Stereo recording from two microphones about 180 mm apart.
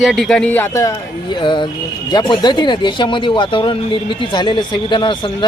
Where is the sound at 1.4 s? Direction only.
25° left (ahead or behind).